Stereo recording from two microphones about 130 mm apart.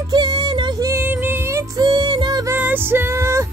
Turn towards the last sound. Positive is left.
turn(degrees=-20)  # may be behind; listen again after turning